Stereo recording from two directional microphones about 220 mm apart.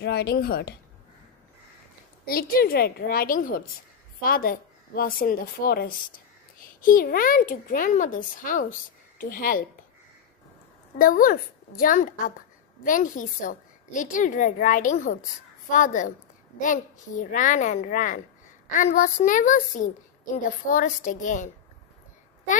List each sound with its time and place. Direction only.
0.0 s a woman's voice: 45° left (ahead or behind)
2.2 s a woman's voice: 40° left (ahead or behind)
11.0 s a woman's voice: 40° left (ahead or behind)